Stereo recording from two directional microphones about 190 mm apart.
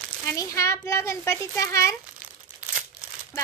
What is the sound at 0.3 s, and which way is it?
A child's voice, 15° left (ahead or behind).